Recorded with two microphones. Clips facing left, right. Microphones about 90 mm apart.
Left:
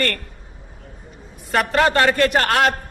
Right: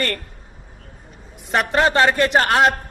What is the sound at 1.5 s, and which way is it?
A man's voice, 20° right (ahead or behind).